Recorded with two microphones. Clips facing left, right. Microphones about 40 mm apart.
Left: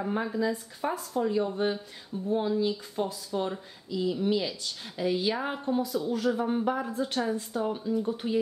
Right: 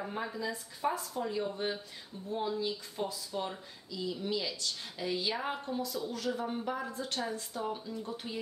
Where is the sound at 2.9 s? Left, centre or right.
Centre.